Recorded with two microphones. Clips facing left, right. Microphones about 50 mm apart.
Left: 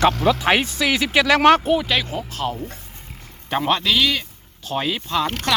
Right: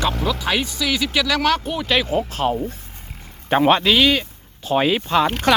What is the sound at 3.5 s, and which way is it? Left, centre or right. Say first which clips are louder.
Speech: right 5 dB; right.